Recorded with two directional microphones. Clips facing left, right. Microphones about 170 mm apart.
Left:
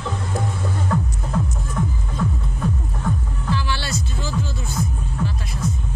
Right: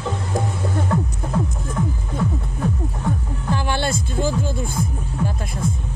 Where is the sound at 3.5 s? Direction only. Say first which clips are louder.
Right 3 dB; 50° right (ahead or behind).